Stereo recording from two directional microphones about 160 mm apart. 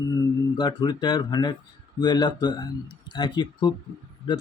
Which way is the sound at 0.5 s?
25° left (ahead or behind).